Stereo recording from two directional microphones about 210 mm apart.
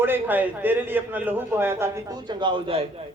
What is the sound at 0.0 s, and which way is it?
A man's voice, 10° right (ahead or behind).